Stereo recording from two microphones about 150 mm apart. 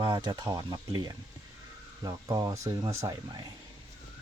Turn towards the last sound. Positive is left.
turn(degrees=-25)  # may be behind; listen again after turning